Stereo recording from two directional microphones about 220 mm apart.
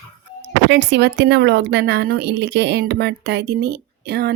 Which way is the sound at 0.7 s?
50° right (ahead or behind).